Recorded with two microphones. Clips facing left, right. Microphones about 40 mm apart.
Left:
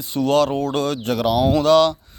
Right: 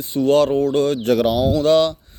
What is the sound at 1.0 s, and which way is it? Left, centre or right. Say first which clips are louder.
Speech: right 5 dB; right.